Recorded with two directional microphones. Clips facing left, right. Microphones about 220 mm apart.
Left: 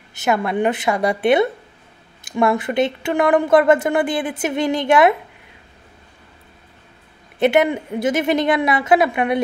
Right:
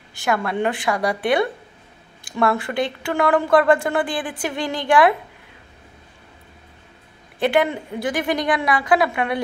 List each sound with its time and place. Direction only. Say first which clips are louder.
0.1 s speech: left 3 dB; 20° left (ahead or behind)
7.3 s speech: left 3 dB; 20° left (ahead or behind)